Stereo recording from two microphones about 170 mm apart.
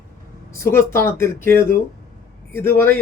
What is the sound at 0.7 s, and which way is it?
A man's voice, 15° left (ahead or behind).